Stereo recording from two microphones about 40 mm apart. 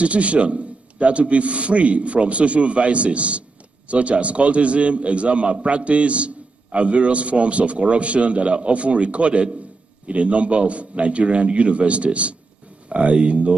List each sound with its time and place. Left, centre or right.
0.0 s a man's voice: right